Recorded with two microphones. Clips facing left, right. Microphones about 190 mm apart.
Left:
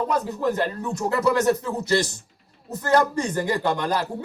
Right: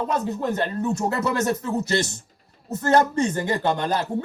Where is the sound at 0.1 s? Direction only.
25° right (ahead or behind).